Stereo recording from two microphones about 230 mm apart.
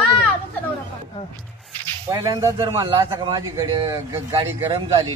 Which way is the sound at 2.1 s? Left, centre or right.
Centre.